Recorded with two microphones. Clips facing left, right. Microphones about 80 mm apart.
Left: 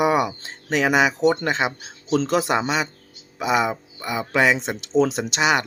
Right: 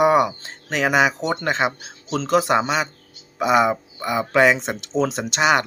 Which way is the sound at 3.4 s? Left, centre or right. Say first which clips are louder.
Right 4 dB; right.